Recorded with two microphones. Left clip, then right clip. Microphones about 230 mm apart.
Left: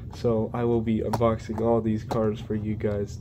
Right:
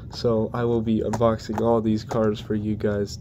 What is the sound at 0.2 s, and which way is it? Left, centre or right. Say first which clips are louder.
Speech: right 3 dB; centre.